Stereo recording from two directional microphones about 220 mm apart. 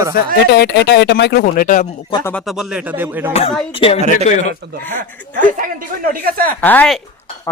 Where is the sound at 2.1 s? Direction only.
20° left (ahead or behind).